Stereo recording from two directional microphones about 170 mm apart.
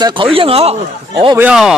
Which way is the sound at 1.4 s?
5° right (ahead or behind).